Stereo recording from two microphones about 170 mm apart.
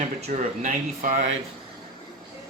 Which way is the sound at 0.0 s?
45° right (ahead or behind).